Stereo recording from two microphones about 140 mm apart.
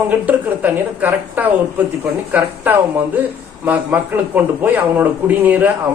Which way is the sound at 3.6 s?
10° right (ahead or behind).